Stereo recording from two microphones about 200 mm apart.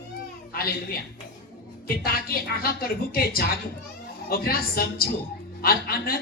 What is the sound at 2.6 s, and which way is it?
A man's voice, 50° left (ahead or behind).